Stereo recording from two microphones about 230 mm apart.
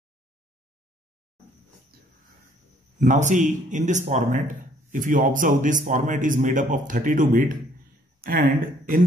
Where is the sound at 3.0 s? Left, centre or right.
Right.